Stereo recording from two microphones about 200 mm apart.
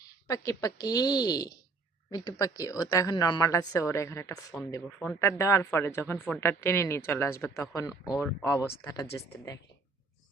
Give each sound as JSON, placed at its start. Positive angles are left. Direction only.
{"t": 0.3, "sound": "speech", "side_deg": 15}